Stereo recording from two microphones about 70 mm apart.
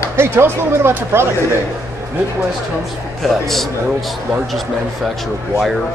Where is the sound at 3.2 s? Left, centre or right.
Centre.